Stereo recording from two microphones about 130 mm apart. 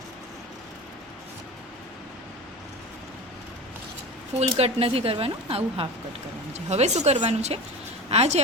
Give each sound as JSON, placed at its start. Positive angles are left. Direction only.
{"t": 4.4, "sound": "speech", "side_deg": -50}
{"t": 6.5, "sound": "speech", "side_deg": -60}